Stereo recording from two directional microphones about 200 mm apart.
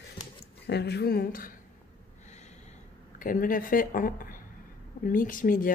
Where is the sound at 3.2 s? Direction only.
45° left (ahead or behind).